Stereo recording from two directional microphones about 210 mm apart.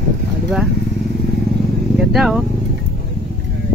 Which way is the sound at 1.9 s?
Centre (ahead or behind).